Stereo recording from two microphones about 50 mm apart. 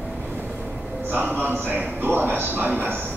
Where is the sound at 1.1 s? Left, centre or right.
Right.